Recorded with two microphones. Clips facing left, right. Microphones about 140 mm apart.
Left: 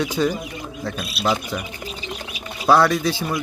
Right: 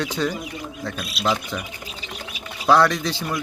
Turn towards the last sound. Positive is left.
turn(degrees=5)  # may be behind; listen again after turning